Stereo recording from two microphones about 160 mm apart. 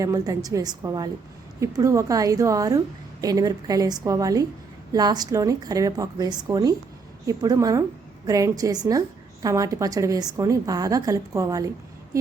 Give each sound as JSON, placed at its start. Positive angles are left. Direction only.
{"t": 0.0, "sound": "a woman's voice", "side_deg": -20}